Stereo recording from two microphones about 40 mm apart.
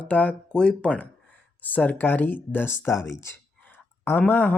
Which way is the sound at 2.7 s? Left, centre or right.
Left.